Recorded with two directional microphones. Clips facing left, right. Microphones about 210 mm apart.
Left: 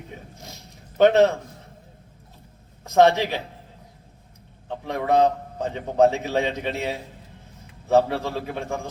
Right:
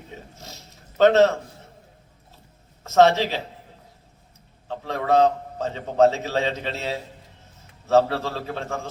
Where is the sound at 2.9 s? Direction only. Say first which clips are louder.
Even; 15° left (ahead or behind).